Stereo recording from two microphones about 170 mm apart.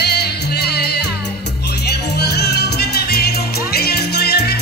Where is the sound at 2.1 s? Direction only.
70° left (ahead or behind).